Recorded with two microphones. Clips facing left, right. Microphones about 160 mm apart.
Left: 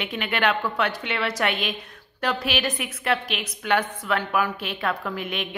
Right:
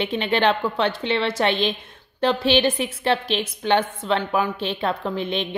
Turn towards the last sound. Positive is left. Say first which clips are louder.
# right 5 dB
turn(degrees=-30)  # may be behind; listen again after turning